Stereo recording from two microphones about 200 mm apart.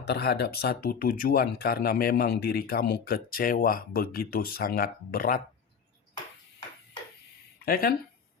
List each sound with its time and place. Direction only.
0.0 s speech: 55° left (ahead or behind)
7.6 s speech: 50° left (ahead or behind)